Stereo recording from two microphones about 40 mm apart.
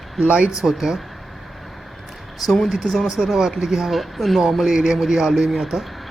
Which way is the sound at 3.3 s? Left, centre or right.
Centre.